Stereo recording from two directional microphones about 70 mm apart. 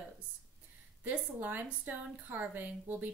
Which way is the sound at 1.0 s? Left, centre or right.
Right.